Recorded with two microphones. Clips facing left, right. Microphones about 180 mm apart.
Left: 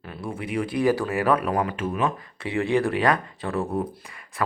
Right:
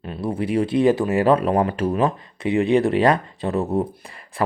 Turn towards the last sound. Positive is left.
turn(degrees=-30)  # may be behind; listen again after turning